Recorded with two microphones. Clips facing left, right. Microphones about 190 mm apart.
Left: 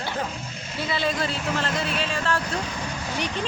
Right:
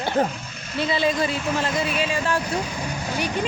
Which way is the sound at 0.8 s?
15° right (ahead or behind).